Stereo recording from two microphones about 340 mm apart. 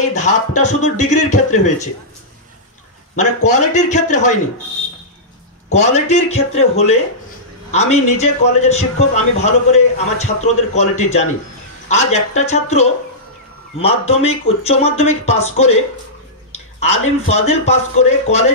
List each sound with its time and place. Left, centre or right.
0.6 s speech: left
3.2 s speech: left
5.7 s speech: centre
16.8 s speech: centre